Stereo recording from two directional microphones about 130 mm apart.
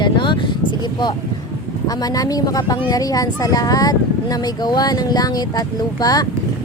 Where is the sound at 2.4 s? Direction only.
30° left (ahead or behind).